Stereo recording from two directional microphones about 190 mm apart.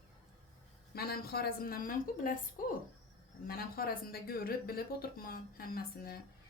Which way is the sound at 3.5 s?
50° left (ahead or behind).